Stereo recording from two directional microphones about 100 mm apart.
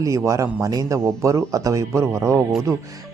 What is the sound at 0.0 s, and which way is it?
Speech, 30° right (ahead or behind).